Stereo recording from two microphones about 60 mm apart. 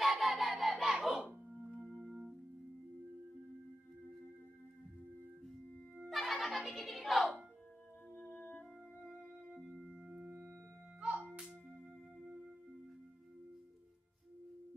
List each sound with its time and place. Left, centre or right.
0.0 s a sound: centre
1.8 s music: centre
6.0 s music: centre
6.6 s speech: centre
8.3 s music: left
9.0 s music: centre
9.8 s singing bowl: centre
11.0 s music: centre